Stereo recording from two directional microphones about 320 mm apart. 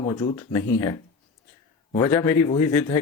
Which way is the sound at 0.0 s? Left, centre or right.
Centre.